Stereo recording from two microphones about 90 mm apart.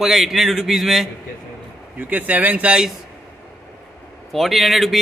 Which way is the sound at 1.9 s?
20° right (ahead or behind).